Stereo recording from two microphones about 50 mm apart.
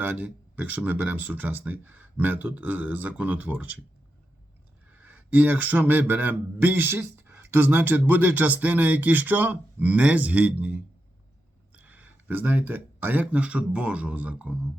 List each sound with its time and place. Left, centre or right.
0.0 s speech: right
4.9 s speech: right
6.8 s speech: right